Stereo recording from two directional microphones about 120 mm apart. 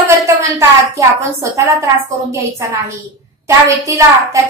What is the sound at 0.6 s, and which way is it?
A woman's voice, 25° right (ahead or behind).